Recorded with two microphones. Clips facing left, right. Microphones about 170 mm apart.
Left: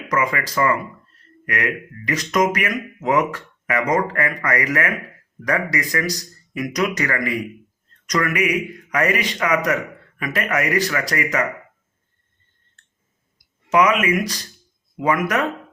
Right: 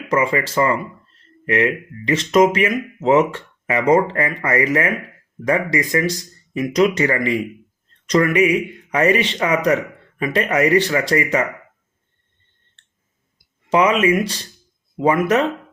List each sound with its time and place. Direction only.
0.1 s speech: 30° right (ahead or behind)
13.7 s speech: 30° right (ahead or behind)